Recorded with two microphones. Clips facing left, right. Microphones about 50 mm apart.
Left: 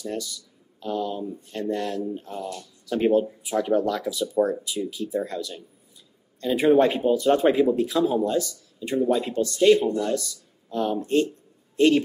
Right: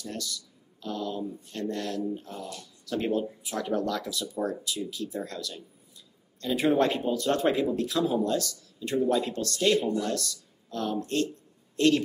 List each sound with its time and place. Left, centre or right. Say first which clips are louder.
0.0 s a man's voice: left 5 dB; left